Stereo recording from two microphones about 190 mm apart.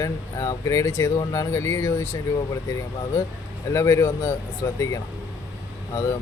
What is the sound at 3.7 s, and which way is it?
A man's voice, 15° left (ahead or behind).